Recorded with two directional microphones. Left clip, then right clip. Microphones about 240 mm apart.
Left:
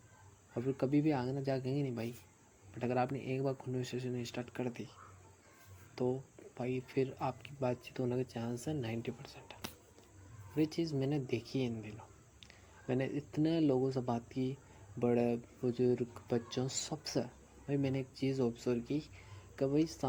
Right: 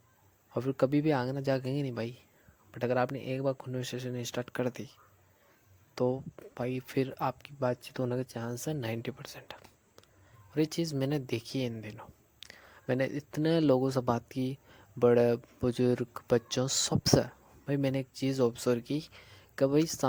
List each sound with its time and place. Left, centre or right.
0.5 s speech: right